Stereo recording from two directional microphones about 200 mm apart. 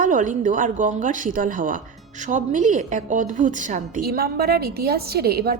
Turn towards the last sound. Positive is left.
turn(degrees=-50)  # may be behind; listen again after turning